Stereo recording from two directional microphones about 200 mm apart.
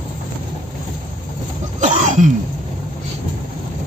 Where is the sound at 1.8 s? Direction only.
40° right (ahead or behind).